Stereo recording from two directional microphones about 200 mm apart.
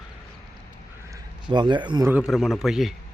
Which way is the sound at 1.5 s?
25° right (ahead or behind).